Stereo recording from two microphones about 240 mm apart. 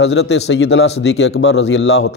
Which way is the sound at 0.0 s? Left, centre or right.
Left.